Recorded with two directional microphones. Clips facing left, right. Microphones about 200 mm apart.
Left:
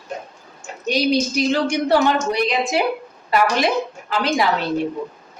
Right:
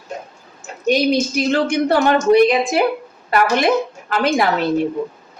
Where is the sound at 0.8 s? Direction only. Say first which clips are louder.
Right 3 dB; 55° right (ahead or behind).